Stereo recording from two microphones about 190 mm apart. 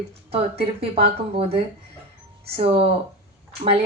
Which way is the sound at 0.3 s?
30° right (ahead or behind).